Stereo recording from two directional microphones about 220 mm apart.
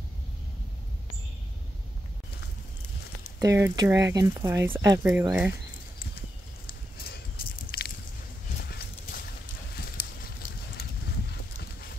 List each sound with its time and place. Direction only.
3.3 s speech: 15° right (ahead or behind)
6.7 s a sound: 45° left (ahead or behind)
8.6 s horse: 45° left (ahead or behind)